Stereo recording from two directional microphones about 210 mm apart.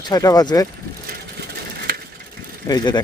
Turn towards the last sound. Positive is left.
turn(degrees=20)  # may be behind; listen again after turning